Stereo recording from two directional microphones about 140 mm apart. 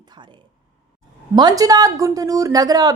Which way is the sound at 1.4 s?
30° right (ahead or behind).